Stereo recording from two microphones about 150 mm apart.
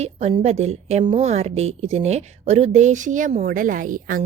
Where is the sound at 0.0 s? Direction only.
45° right (ahead or behind).